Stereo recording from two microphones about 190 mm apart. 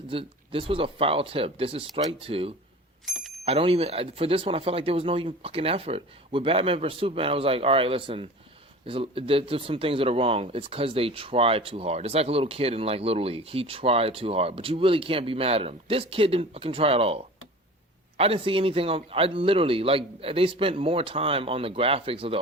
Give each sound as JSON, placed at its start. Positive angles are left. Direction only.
{"t": 0.1, "sound": "speech", "side_deg": -30}
{"t": 3.1, "sound": "bicycle bell", "side_deg": 0}
{"t": 3.4, "sound": "speech", "side_deg": -30}